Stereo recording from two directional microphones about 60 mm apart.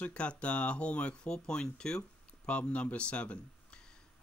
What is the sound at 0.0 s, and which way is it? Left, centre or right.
Speech, centre.